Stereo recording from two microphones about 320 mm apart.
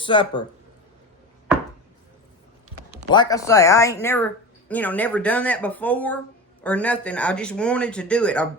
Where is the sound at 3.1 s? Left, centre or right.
Centre.